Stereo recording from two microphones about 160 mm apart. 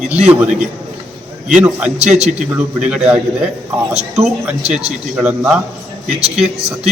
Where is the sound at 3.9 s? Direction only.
40° right (ahead or behind).